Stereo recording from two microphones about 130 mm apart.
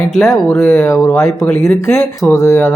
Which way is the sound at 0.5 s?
15° left (ahead or behind).